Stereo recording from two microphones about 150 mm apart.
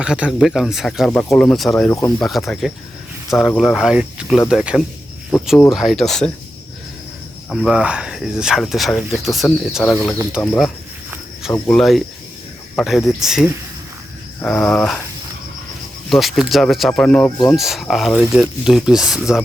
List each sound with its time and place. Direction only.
0.0 s speech: 5° right (ahead or behind)
7.5 s speech: centre (ahead or behind)
9.8 s speech: 15° left (ahead or behind)
11.5 s speech: 15° left (ahead or behind)
11.8 s speech: centre (ahead or behind)
16.0 s speech: centre (ahead or behind)